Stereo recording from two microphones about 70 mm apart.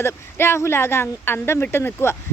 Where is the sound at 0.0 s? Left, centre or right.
Left.